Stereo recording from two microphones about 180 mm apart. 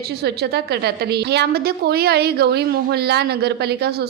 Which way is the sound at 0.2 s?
65° right (ahead or behind).